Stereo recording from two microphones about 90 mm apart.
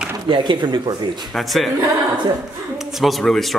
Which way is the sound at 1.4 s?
Centre (ahead or behind).